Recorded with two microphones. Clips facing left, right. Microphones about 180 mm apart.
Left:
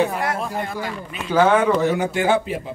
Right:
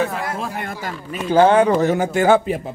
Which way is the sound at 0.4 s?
55° right (ahead or behind).